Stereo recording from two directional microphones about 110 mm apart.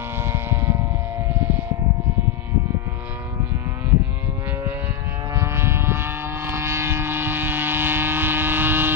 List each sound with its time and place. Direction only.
0.2 s a sound: 20° right (ahead or behind)
1.3 s civil defense siren: 15° right (ahead or behind)
5.3 s vehicle: 25° right (ahead or behind)